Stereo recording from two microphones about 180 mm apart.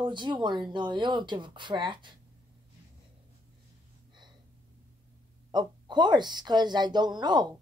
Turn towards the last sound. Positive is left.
turn(degrees=-25)  # may be behind; listen again after turning